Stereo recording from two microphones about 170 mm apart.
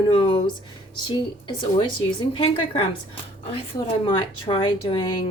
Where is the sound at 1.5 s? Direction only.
30° left (ahead or behind).